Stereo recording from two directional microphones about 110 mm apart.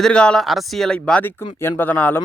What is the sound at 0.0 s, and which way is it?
Speech, 10° left (ahead or behind).